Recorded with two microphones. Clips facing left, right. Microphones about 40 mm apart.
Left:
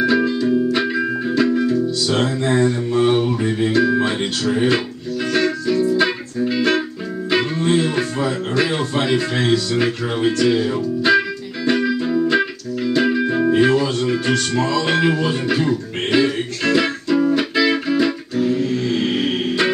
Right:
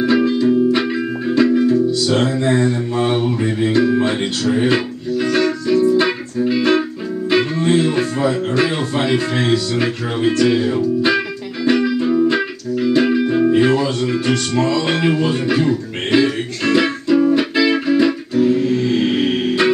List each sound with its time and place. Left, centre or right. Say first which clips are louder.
0.0 s music: right 2 dB; centre
8.2 s speech: right 3 dB; centre
9.8 s music: right 1 dB; centre